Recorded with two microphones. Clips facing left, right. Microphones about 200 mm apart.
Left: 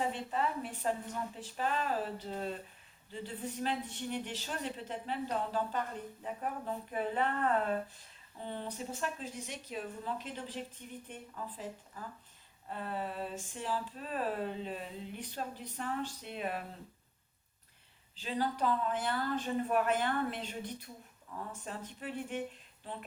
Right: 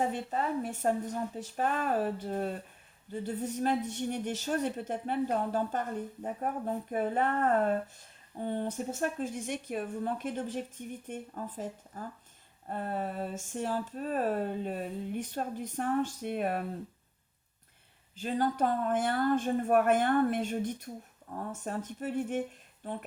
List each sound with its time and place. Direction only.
0.1 s speech: 45° right (ahead or behind)
18.2 s speech: 50° right (ahead or behind)